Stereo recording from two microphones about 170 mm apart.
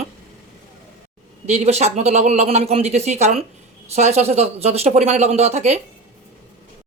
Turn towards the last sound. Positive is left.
turn(degrees=-40)  # may be behind; listen again after turning